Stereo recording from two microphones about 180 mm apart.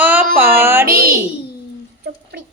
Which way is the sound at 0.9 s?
55° right (ahead or behind).